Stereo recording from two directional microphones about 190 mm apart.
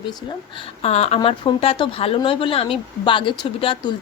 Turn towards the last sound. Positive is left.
turn(degrees=25)  # may be behind; listen again after turning